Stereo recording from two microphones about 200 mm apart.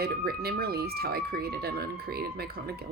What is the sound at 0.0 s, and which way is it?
A woman's voice, 50° right (ahead or behind).